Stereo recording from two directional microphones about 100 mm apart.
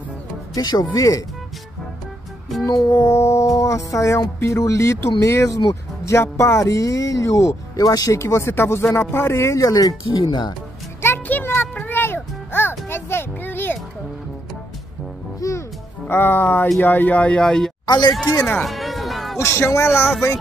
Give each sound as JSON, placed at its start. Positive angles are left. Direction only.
{"t": 0.6, "sound": "speech", "side_deg": 40}
{"t": 2.6, "sound": "speech", "side_deg": 40}
{"t": 10.0, "sound": "speech", "side_deg": 50}
{"t": 11.0, "sound": "music", "side_deg": 20}
{"t": 15.4, "sound": "music", "side_deg": 35}
{"t": 16.1, "sound": "speech", "side_deg": 20}
{"t": 17.8, "sound": "speech", "side_deg": 45}
{"t": 18.4, "sound": "music", "side_deg": 5}
{"t": 19.3, "sound": "speech", "side_deg": 25}